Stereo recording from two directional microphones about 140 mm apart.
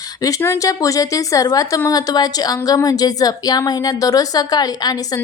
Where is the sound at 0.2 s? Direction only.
25° left (ahead or behind).